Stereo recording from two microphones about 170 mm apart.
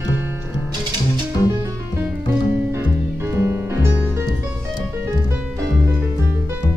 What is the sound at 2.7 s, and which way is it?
Music, 15° right (ahead or behind).